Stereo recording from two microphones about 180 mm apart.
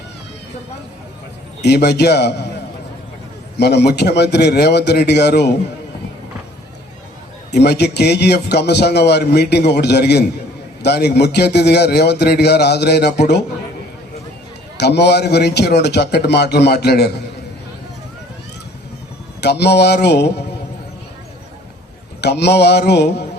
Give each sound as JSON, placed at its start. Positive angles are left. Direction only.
{"t": 1.6, "sound": "a man's voice", "side_deg": 65}
{"t": 3.6, "sound": "a man's voice", "side_deg": 65}
{"t": 7.5, "sound": "a man's voice", "side_deg": 65}
{"t": 14.8, "sound": "a man's voice", "side_deg": 65}
{"t": 19.4, "sound": "a man's voice", "side_deg": 65}
{"t": 22.2, "sound": "a man's voice", "side_deg": 65}